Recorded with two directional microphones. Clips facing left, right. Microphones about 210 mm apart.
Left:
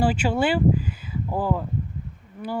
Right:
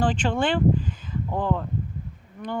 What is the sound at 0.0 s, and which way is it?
A woman's voice, 10° left (ahead or behind).